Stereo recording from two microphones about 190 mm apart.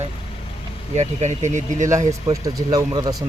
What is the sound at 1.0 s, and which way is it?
Speech, 40° right (ahead or behind).